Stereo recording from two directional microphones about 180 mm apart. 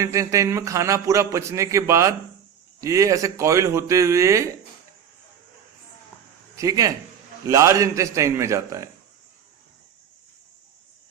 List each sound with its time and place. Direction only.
0.0 s a man's voice: 15° right (ahead or behind)
6.6 s a man's voice: 20° right (ahead or behind)